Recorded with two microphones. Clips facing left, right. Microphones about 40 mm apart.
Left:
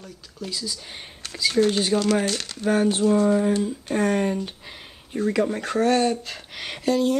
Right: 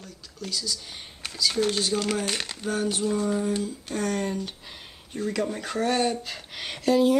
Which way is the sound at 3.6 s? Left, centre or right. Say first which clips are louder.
Left 6 dB; left.